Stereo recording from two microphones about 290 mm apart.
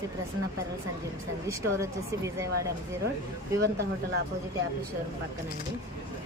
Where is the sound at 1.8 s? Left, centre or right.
Centre.